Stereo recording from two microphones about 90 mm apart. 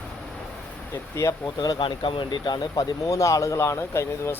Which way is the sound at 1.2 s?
35° left (ahead or behind).